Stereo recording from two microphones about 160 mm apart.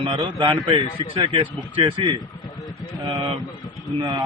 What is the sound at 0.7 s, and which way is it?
A man's voice, 30° right (ahead or behind).